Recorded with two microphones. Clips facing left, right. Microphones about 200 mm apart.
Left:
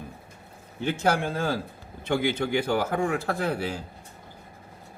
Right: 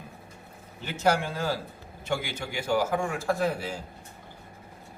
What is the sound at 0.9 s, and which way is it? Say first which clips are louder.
A man's voice: left 1 dB; 55° left (ahead or behind).